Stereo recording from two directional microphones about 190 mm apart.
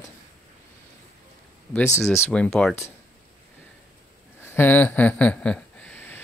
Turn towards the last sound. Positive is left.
turn(degrees=10)  # may be behind; listen again after turning